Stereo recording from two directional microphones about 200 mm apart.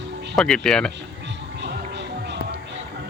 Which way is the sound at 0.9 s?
60° right (ahead or behind).